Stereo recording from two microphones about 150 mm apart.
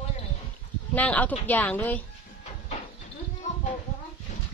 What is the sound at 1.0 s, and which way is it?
A woman's voice, 10° left (ahead or behind).